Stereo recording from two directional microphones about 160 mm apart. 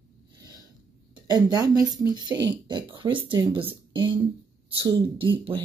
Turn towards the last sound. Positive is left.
turn(degrees=-30)  # may be behind; listen again after turning